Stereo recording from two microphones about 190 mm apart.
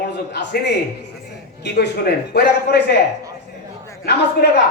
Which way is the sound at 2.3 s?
60° left (ahead or behind).